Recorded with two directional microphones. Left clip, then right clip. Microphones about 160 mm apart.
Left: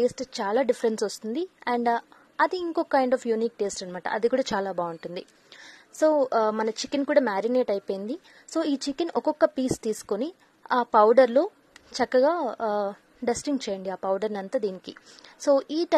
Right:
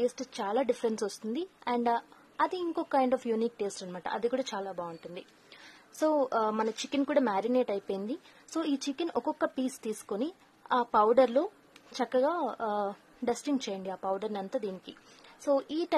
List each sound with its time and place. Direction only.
0.0 s a woman's voice: 25° left (ahead or behind)
4.6 s a woman's voice: 40° left (ahead or behind)
5.9 s a woman's voice: 20° left (ahead or behind)